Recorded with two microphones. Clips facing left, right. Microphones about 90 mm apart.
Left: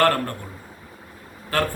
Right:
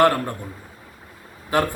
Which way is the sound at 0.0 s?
15° right (ahead or behind).